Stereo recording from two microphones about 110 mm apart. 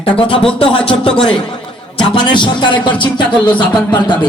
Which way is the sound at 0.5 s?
55° left (ahead or behind).